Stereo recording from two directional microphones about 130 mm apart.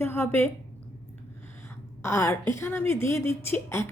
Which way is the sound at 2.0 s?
20° left (ahead or behind).